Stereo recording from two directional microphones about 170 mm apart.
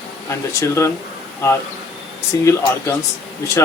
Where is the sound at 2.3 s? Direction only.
20° left (ahead or behind).